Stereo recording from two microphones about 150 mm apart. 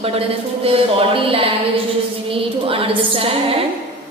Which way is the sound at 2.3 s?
40° right (ahead or behind).